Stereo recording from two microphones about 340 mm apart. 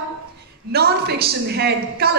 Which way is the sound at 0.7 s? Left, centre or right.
Right.